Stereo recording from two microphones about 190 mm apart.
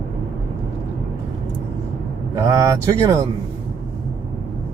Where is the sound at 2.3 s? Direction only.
15° right (ahead or behind).